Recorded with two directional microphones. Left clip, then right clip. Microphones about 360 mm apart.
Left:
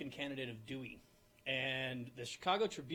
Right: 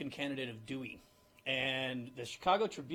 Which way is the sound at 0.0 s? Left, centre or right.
Centre.